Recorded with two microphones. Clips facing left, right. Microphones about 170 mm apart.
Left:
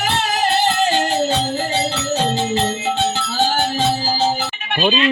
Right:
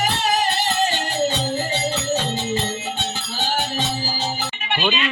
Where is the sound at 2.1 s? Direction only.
75° left (ahead or behind).